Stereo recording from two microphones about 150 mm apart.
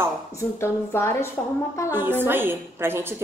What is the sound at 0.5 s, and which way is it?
Speech, 15° left (ahead or behind).